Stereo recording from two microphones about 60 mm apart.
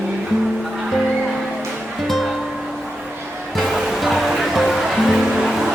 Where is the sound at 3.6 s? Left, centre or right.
Centre.